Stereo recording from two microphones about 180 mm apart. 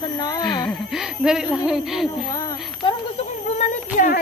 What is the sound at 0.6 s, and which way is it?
Speech, centre (ahead or behind).